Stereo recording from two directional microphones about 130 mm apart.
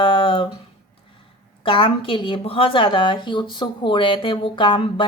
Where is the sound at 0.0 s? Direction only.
40° left (ahead or behind).